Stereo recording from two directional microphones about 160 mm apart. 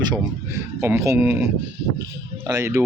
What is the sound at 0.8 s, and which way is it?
Speech, 20° right (ahead or behind).